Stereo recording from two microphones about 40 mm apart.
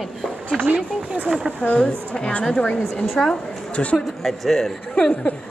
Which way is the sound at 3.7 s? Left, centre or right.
Left.